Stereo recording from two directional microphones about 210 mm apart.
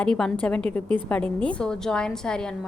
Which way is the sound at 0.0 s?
5° left (ahead or behind).